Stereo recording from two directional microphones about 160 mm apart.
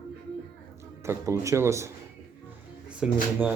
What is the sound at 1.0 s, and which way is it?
Speech, 15° right (ahead or behind).